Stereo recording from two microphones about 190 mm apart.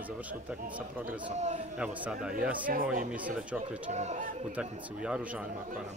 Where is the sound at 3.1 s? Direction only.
5° right (ahead or behind).